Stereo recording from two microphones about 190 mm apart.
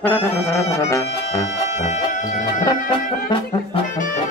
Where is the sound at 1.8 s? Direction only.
40° left (ahead or behind).